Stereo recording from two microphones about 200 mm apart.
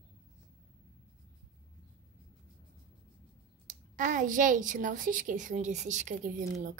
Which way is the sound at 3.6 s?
40° right (ahead or behind).